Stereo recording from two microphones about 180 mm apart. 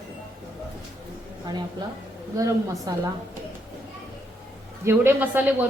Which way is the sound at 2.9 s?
20° right (ahead or behind).